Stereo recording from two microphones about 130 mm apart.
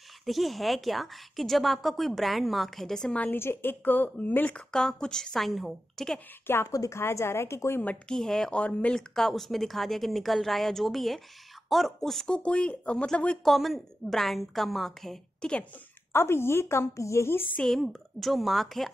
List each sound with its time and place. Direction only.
0.2 s a woman's voice: centre (ahead or behind)
6.4 s a woman's voice: 20° left (ahead or behind)
16.1 s a woman's voice: 20° left (ahead or behind)
17.6 s a woman's voice: 5° left (ahead or behind)